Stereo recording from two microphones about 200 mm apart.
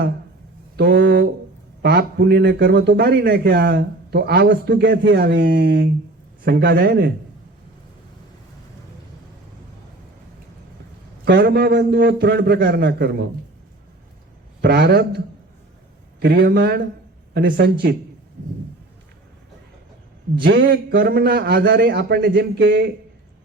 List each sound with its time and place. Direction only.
0.8 s a sound: 55° right (ahead or behind)
1.8 s speech: 50° right (ahead or behind)
11.3 s speech: 50° right (ahead or behind)
14.6 s speech: 55° right (ahead or behind)
16.2 s speech: 55° right (ahead or behind)
20.5 s speech: 65° right (ahead or behind)